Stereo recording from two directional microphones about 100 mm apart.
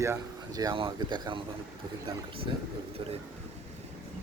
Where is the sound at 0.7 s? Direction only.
55° right (ahead or behind).